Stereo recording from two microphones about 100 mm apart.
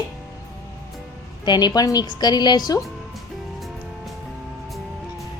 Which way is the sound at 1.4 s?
45° left (ahead or behind).